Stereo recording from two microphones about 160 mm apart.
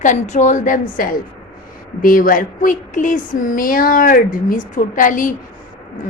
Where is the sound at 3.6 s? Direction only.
65° left (ahead or behind).